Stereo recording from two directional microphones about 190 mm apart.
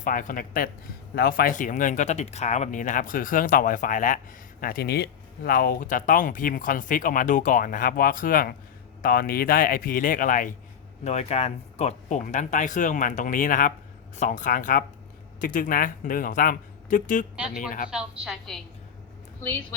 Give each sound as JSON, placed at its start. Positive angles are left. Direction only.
{"t": 0.0, "sound": "speech", "side_deg": 45}
{"t": 17.3, "sound": "a woman's voice", "side_deg": -5}